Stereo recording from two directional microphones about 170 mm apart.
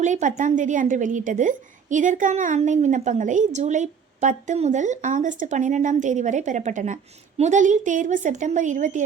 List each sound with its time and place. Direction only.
0.0 s a woman's voice: 45° right (ahead or behind)